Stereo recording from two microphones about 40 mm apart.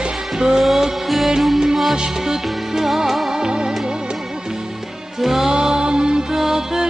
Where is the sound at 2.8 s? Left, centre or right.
Centre.